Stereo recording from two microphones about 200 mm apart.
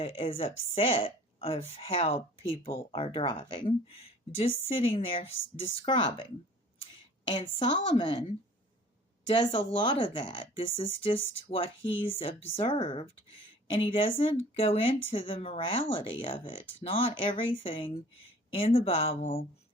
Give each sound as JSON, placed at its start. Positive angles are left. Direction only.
{"t": 0.0, "sound": "speech", "side_deg": 30}
{"t": 7.3, "sound": "speech", "side_deg": 25}
{"t": 9.3, "sound": "speech", "side_deg": 25}